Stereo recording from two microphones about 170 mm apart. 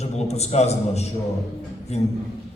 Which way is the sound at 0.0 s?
40° left (ahead or behind).